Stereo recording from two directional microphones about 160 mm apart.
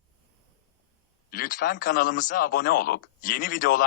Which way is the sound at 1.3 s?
60° left (ahead or behind).